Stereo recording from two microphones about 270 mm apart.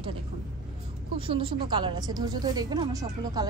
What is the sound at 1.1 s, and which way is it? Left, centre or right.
A woman's voice, centre.